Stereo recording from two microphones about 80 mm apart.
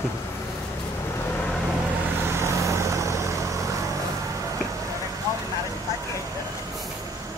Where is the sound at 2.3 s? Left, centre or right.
Right.